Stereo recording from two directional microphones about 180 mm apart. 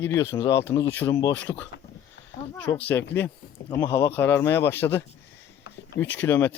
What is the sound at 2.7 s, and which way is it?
Speech, 15° left (ahead or behind).